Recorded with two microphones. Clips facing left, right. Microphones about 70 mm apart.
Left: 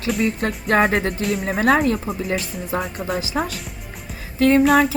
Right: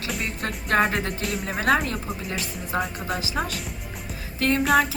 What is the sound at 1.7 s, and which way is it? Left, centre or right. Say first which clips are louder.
Speech: left 4 dB; left.